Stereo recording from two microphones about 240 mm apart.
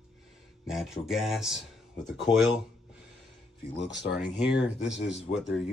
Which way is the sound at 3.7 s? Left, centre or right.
Left.